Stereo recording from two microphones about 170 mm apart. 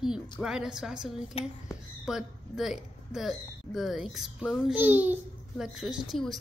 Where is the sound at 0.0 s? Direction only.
5° right (ahead or behind).